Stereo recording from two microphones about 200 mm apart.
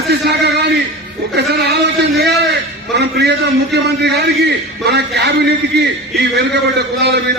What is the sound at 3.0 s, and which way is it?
A man's voice, 55° right (ahead or behind).